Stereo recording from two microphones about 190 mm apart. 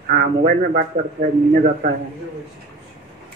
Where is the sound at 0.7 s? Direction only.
50° right (ahead or behind).